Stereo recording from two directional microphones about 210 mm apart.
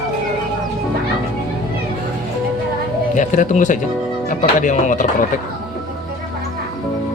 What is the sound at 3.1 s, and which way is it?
Speech, 35° left (ahead or behind).